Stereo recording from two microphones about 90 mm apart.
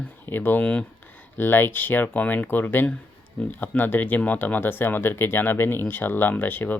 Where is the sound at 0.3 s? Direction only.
20° left (ahead or behind).